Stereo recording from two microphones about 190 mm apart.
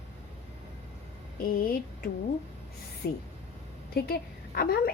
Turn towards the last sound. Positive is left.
turn(degrees=55)  # may be behind; listen again after turning